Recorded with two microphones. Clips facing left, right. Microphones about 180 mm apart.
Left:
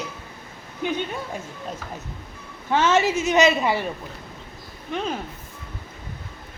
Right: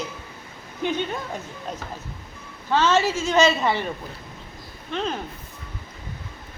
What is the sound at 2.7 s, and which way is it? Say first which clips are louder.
A woman's voice: left 1 dB; 20° left (ahead or behind).